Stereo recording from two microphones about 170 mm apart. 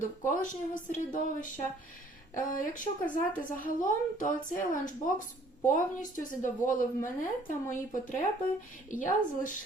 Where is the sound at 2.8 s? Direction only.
50° left (ahead or behind).